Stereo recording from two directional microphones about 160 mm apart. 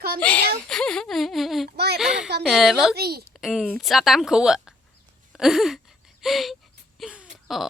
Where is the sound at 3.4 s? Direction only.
Centre (ahead or behind).